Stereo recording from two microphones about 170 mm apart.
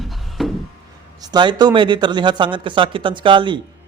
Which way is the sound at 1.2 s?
25° right (ahead or behind).